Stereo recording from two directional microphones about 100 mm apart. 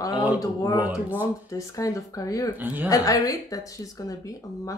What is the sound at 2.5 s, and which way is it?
Speech, 20° right (ahead or behind).